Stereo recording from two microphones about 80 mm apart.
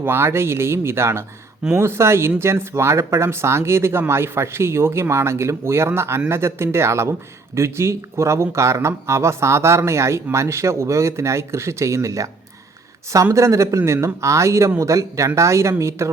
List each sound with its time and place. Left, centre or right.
0.0 s speech: right
13.3 s speech: right